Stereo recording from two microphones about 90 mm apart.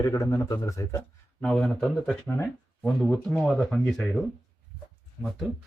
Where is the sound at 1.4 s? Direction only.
10° left (ahead or behind).